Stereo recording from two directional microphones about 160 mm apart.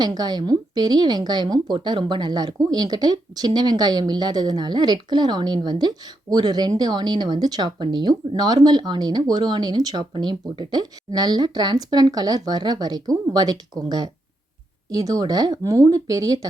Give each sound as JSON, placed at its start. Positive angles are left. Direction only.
{"t": 0.0, "sound": "speech", "side_deg": -25}